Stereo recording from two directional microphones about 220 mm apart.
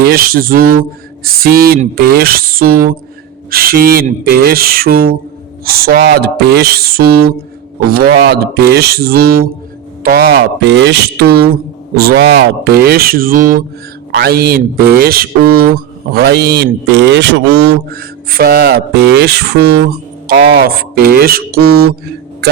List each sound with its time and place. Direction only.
0.0 s speech: 40° right (ahead or behind)